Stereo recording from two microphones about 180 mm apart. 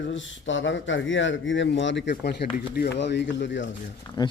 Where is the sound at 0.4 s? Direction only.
90° left.